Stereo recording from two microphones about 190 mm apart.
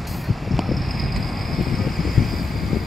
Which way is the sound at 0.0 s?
Centre (ahead or behind).